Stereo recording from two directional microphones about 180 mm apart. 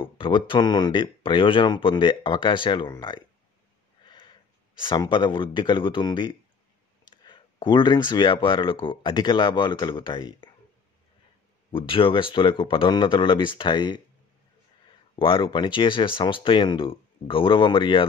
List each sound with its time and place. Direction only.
0.0 s speech: 30° left (ahead or behind)
11.7 s speech: 30° left (ahead or behind)
15.1 s speech: 30° left (ahead or behind)